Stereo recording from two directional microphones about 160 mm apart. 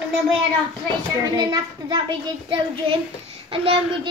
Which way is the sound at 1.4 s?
30° right (ahead or behind).